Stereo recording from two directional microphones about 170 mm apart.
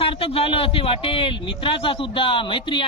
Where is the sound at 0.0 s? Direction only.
35° left (ahead or behind).